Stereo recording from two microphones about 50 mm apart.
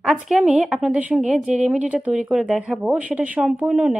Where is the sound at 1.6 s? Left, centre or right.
Right.